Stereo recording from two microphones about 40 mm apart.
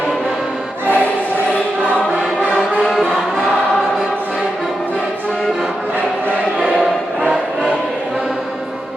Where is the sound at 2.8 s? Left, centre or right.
Centre.